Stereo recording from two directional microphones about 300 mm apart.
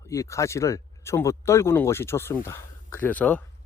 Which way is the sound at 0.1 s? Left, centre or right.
Centre.